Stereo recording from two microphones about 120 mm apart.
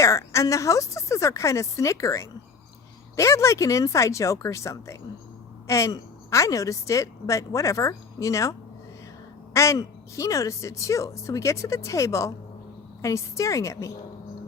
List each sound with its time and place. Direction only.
0.0 s a woman's voice: 25° left (ahead or behind)